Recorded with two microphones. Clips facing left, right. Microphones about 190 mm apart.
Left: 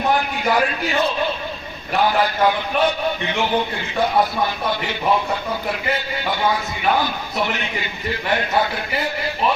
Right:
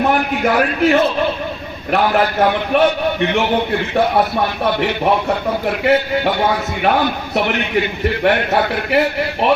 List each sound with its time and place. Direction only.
0.1 s a man's voice: 65° right (ahead or behind)